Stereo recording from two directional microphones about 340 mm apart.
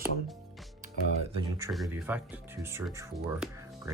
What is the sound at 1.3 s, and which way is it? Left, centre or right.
Speech, centre.